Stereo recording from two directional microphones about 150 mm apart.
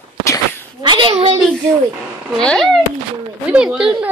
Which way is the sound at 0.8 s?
35° right (ahead or behind).